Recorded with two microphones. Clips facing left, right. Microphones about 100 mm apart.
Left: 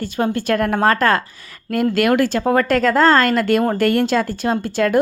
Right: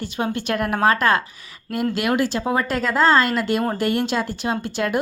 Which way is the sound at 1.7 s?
50° left (ahead or behind).